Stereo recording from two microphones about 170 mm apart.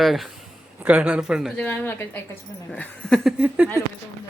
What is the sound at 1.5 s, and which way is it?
Speech, 10° left (ahead or behind).